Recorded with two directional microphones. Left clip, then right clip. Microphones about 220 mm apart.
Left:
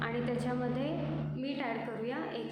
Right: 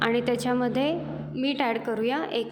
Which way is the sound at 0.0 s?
45° right (ahead or behind).